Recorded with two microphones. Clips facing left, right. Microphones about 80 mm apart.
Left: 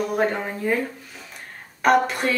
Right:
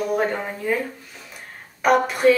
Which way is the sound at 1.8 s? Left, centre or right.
Centre.